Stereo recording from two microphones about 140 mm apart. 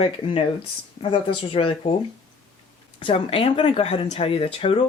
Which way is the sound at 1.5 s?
40° left (ahead or behind).